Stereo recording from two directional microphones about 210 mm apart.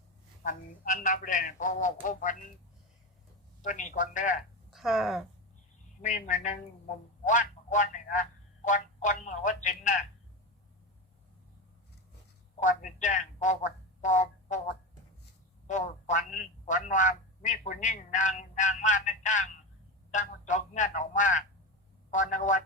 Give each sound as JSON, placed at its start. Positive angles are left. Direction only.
{"t": 0.4, "sound": "a man's voice", "side_deg": 40}
{"t": 3.6, "sound": "a man's voice", "side_deg": 35}
{"t": 4.7, "sound": "speech", "side_deg": 0}
{"t": 6.0, "sound": "a man's voice", "side_deg": 35}
{"t": 12.5, "sound": "a man's voice", "side_deg": 35}
{"t": 15.6, "sound": "a man's voice", "side_deg": 35}